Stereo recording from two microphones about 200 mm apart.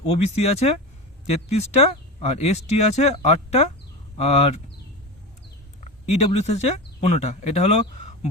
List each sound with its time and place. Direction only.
0.1 s speech: 30° left (ahead or behind)
5.8 s speech: 35° left (ahead or behind)